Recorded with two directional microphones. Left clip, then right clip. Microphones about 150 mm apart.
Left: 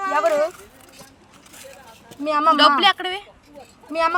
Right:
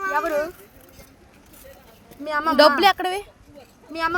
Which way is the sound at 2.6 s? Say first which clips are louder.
Even; 55° right (ahead or behind).